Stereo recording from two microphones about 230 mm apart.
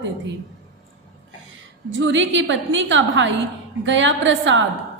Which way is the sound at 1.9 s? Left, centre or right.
Right.